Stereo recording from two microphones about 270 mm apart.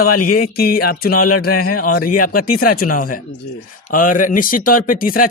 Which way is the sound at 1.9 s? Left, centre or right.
Left.